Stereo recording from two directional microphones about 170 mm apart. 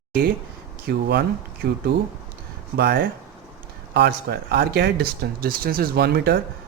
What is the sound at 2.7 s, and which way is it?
Speech, 65° right (ahead or behind).